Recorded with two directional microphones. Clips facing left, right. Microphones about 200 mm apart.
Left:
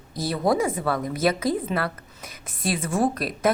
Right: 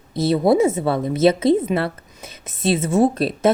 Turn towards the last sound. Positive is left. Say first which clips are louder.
# right 7 dB
turn(degrees=-25)  # may be behind; listen again after turning